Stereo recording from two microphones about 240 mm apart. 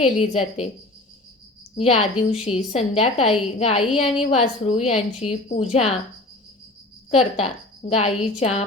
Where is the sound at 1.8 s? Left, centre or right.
Left.